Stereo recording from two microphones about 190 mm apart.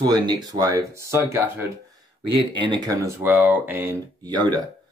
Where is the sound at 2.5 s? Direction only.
25° right (ahead or behind).